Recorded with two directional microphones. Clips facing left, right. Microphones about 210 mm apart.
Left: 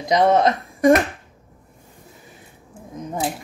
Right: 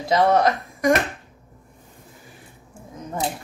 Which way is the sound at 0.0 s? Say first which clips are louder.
Left 2 dB; 20° left (ahead or behind).